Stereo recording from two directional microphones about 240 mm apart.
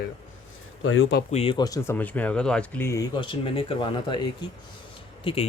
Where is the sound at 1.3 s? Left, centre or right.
Left.